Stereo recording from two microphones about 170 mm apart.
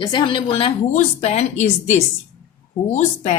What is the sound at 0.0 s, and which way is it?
A woman's voice, 25° left (ahead or behind).